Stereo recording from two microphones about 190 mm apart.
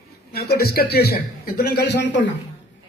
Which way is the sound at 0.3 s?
55° left (ahead or behind).